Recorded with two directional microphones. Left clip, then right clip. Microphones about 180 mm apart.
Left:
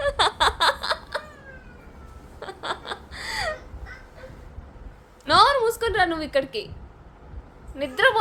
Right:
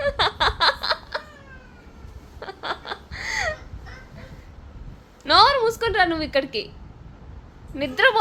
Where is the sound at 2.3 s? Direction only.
10° right (ahead or behind).